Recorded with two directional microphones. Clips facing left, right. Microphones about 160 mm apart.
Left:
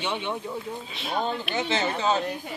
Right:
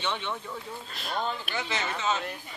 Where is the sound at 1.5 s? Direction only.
25° left (ahead or behind).